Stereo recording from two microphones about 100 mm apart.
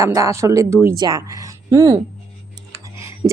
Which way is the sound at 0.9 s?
40° right (ahead or behind).